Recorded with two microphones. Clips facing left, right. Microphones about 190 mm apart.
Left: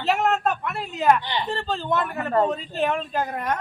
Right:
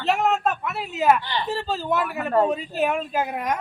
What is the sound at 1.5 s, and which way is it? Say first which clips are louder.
Speech: right 1 dB; 5° right (ahead or behind).